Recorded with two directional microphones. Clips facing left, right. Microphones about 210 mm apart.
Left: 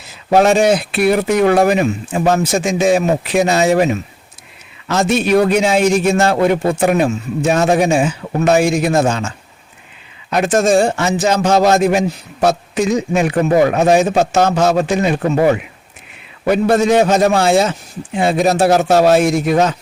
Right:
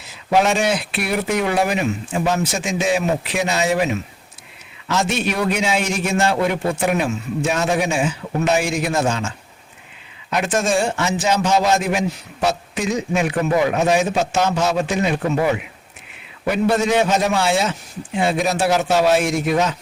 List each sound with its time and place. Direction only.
0.3 s a man's voice: 40° left (ahead or behind)
4.9 s a man's voice: 40° left (ahead or behind)